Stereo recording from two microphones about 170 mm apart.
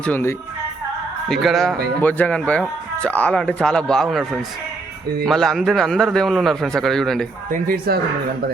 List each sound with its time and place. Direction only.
0.0 s speech: 10° left (ahead or behind)
1.3 s a man's voice: centre (ahead or behind)
7.5 s speech: 60° right (ahead or behind)